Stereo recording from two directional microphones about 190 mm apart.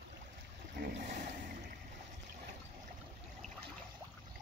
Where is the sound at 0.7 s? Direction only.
45° right (ahead or behind).